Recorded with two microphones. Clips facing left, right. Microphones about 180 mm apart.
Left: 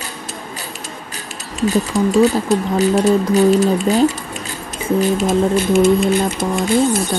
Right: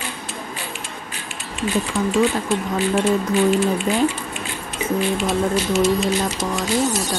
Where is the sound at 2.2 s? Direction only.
40° left (ahead or behind).